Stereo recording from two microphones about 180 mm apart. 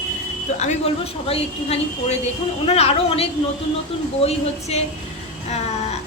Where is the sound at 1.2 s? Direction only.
35° left (ahead or behind).